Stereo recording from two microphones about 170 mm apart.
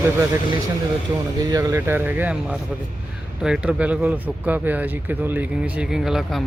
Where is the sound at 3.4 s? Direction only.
5° right (ahead or behind).